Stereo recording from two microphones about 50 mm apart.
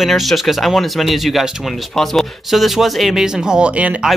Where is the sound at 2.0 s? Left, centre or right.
Centre.